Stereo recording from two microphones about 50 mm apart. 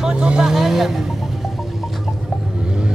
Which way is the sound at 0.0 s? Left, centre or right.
Centre.